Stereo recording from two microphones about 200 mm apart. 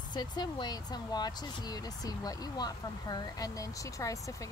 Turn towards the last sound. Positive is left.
turn(degrees=15)  # may be behind; listen again after turning